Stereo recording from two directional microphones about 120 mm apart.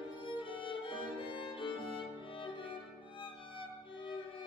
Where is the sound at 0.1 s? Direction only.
45° left (ahead or behind).